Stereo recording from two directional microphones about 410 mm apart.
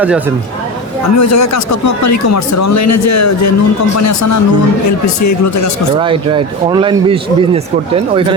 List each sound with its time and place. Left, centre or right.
1.1 s speech: left
6.0 s speech: centre